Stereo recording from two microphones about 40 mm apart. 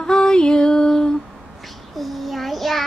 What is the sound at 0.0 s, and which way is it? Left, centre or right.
Female singing, centre.